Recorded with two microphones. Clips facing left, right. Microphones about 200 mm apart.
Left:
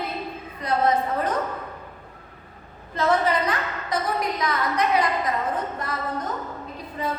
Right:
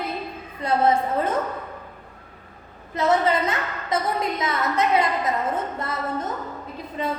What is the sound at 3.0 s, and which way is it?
A woman's voice, 25° right (ahead or behind).